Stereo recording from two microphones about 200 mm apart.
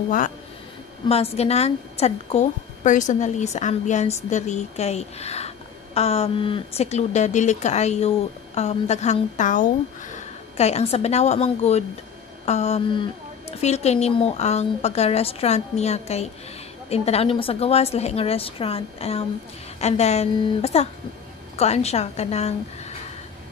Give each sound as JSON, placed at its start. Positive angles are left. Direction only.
{"t": 1.0, "sound": "a woman's voice", "side_deg": 30}